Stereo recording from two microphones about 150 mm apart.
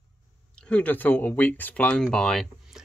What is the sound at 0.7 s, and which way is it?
Speech, 10° left (ahead or behind).